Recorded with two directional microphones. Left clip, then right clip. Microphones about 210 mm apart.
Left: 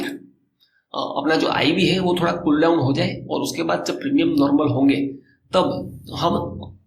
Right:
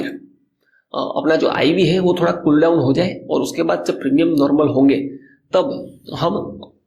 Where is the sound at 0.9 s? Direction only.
35° right (ahead or behind).